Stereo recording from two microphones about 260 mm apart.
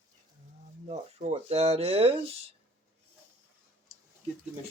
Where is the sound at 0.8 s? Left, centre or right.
Right.